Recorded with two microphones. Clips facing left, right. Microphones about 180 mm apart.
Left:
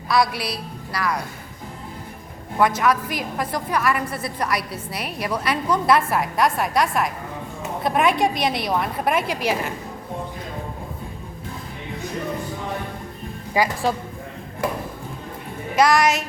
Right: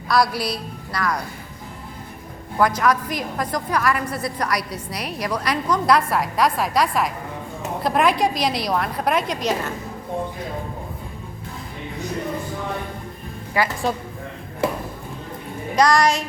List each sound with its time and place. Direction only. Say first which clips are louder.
0.1 s a woman's voice: right 1 dB; centre (ahead or behind)
2.6 s a woman's voice: even; 5° left (ahead or behind)
15.7 s a woman's voice: even; 5° left (ahead or behind)